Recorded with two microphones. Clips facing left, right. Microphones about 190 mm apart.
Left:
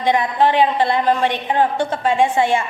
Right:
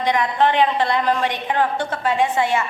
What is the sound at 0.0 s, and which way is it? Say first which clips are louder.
A woman's voice: left 2 dB; 25° left (ahead or behind).